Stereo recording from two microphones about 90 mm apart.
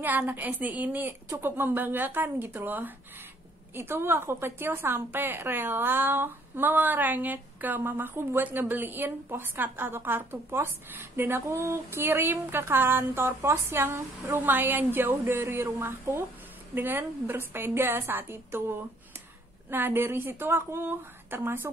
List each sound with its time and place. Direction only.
0.0 s a woman's voice: 20° right (ahead or behind)